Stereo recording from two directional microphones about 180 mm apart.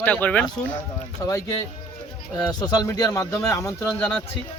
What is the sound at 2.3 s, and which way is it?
Speech, 20° left (ahead or behind).